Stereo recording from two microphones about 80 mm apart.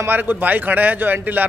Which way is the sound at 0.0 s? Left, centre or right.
Right.